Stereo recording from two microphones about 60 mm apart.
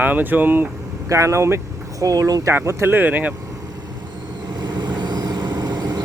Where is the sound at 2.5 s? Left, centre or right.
Right.